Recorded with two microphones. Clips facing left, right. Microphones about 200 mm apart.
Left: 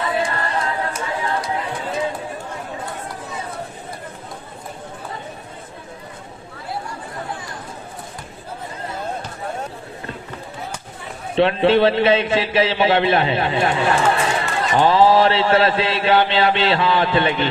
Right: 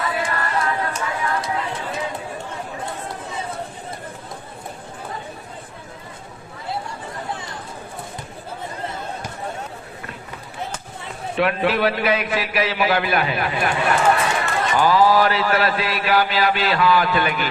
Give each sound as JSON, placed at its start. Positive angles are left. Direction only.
{"t": 0.0, "sound": "a capella", "side_deg": 30}
{"t": 11.3, "sound": "a man's voice", "side_deg": 25}